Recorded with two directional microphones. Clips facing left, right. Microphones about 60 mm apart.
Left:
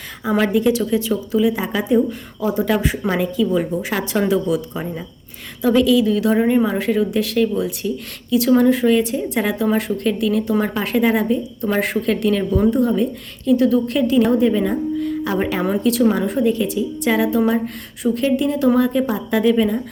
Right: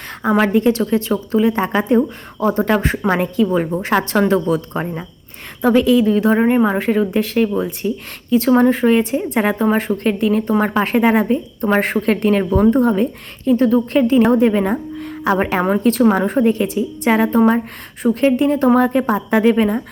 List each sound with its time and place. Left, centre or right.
0.2 s a woman's voice: right
12.7 s a woman's voice: right
13.4 s speech: right
14.2 s a woman's voice: right
15.6 s a woman's voice: right